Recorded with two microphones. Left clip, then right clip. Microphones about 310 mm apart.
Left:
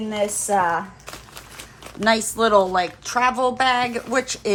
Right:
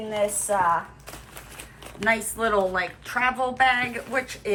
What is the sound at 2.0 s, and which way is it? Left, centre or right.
A woman's voice, centre.